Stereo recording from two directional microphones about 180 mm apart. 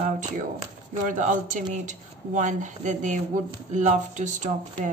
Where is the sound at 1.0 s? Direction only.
45° right (ahead or behind).